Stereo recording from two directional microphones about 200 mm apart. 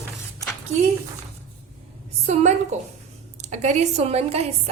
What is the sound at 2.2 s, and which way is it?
A woman's voice, 35° right (ahead or behind).